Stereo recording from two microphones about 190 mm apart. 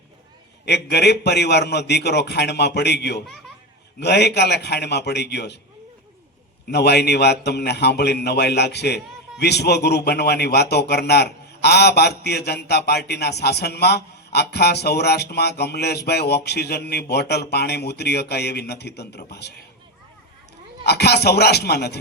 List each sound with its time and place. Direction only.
0.6 s a man's voice: 60° left (ahead or behind)
6.7 s a man's voice: 60° left (ahead or behind)
20.8 s a man's voice: 60° left (ahead or behind)